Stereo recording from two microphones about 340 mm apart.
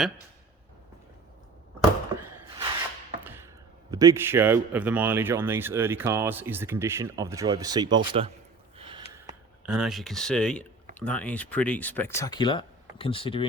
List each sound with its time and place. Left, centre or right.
1.8 s a sound: centre
3.2 s chop: centre
3.9 s a man's voice: centre
9.2 s speech: centre